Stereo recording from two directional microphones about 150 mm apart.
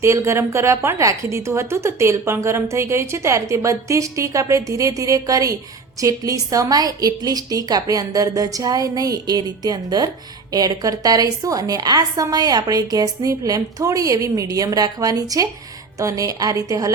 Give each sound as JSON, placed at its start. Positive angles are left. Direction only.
{"t": 0.0, "sound": "a woman's voice", "side_deg": -20}